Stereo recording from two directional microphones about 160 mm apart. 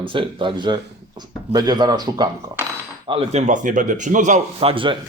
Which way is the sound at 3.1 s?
45° right (ahead or behind).